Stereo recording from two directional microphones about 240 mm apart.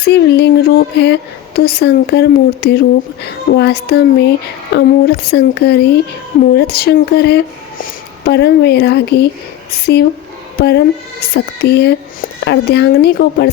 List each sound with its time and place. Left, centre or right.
0.0 s speech: left